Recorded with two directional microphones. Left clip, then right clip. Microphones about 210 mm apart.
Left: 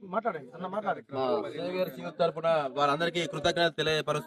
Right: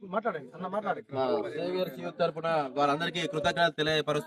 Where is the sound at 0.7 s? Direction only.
15° left (ahead or behind).